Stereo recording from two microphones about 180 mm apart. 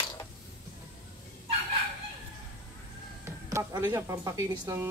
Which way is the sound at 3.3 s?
15° right (ahead or behind).